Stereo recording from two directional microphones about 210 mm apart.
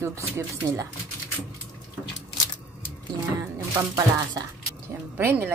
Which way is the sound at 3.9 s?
20° right (ahead or behind).